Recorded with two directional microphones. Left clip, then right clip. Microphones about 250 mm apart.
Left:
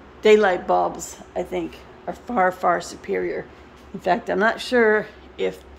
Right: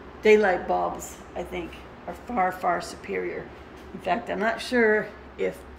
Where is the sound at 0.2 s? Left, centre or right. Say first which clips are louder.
Left 3 dB; centre.